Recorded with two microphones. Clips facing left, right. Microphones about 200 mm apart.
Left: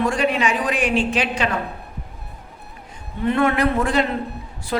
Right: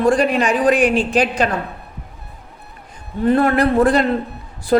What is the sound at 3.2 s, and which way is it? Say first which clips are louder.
Speech: right 4 dB; 35° right (ahead or behind).